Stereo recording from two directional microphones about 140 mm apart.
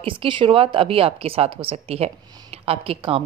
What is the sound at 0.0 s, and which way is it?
A woman's voice, 40° right (ahead or behind).